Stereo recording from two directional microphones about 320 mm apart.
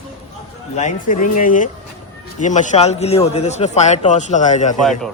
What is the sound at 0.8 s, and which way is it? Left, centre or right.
A man's voice, left.